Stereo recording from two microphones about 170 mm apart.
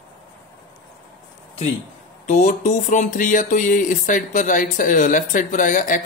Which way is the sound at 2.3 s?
45° left (ahead or behind).